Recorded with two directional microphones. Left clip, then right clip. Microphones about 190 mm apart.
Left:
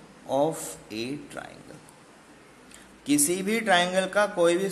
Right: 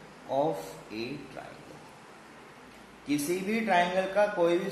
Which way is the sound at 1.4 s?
55° left (ahead or behind).